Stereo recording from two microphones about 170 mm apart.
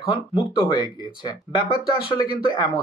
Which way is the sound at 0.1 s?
30° left (ahead or behind).